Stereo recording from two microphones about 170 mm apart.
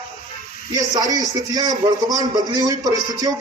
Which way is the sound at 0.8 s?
20° right (ahead or behind).